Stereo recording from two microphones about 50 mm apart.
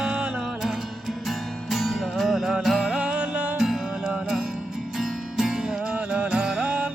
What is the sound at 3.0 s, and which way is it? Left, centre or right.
Music, right.